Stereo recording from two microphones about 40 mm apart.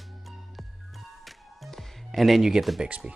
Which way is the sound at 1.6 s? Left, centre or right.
Centre.